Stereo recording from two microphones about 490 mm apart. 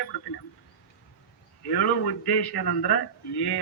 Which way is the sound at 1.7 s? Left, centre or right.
Left.